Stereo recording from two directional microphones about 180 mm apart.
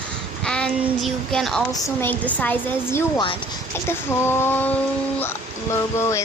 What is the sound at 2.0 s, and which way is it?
Speech, 10° left (ahead or behind).